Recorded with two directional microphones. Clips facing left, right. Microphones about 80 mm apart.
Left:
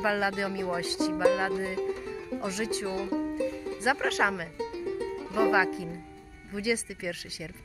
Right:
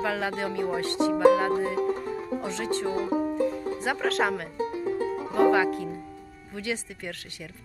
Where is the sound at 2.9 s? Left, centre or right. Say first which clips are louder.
Right 4 dB; right.